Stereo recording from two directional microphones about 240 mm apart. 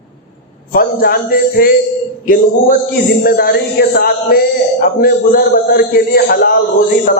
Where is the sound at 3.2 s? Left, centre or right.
Left.